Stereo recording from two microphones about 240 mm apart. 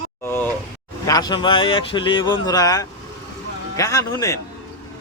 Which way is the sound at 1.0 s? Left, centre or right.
Centre.